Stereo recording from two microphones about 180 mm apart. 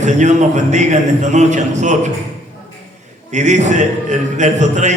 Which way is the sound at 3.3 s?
40° right (ahead or behind).